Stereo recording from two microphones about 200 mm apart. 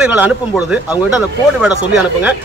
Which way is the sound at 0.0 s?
5° right (ahead or behind).